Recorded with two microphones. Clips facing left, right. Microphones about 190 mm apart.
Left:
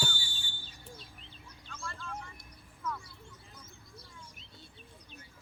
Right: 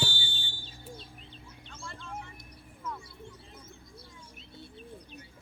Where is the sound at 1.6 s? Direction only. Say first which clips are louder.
Left 1 dB; 25° right (ahead or behind).